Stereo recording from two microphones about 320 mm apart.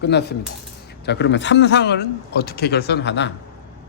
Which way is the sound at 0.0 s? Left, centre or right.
Left.